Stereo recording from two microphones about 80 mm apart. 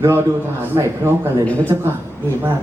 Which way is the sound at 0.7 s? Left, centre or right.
Right.